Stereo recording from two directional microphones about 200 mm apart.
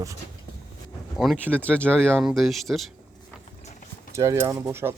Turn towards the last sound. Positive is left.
turn(degrees=-10)  # may be behind; listen again after turning